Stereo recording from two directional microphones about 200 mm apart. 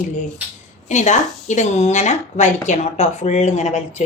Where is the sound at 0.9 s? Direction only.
35° left (ahead or behind).